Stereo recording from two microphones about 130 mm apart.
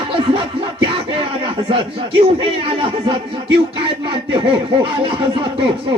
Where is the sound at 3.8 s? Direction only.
40° right (ahead or behind).